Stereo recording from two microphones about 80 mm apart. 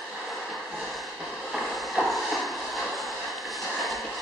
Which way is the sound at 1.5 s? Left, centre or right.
Centre.